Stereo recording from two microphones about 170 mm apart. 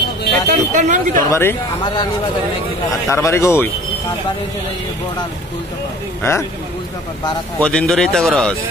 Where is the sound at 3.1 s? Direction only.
15° left (ahead or behind).